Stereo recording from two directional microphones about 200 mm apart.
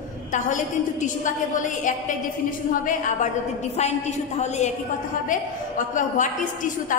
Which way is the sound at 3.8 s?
35° left (ahead or behind).